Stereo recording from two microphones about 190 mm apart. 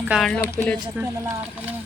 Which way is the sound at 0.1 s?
Centre (ahead or behind).